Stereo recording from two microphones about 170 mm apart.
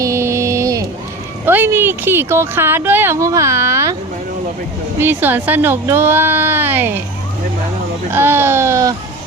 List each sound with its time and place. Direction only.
0.0 s a sound: 15° right (ahead or behind)
1.5 s speech: 10° right (ahead or behind)
4.9 s speech: 10° right (ahead or behind)
8.1 s speech: 15° right (ahead or behind)